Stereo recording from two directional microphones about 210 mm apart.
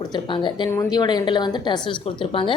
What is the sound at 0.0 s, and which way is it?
A woman's voice, 20° left (ahead or behind).